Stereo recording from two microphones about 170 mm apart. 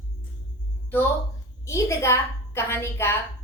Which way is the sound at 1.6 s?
15° left (ahead or behind).